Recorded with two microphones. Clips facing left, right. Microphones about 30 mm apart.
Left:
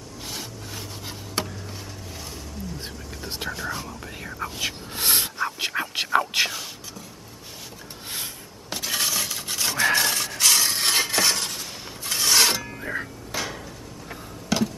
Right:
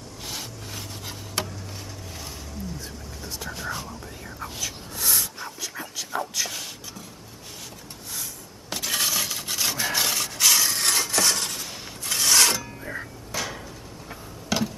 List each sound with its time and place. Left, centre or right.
0.3 s rub: centre
3.5 s whispering: centre
4.4 s a sound: left
5.7 s whispering: left
6.1 s a sound: left
8.6 s rub: centre
10.7 s a sound: centre
11.2 s rub: centre
12.5 s music: left
14.5 s music: centre